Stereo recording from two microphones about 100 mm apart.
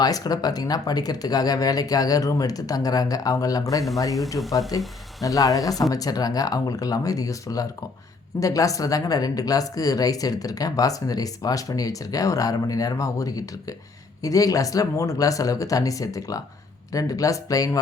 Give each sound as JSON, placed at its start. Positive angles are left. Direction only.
{"t": 0.0, "sound": "speech", "side_deg": 40}